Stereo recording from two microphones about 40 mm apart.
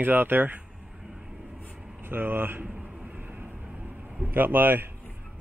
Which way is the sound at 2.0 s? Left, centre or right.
Right.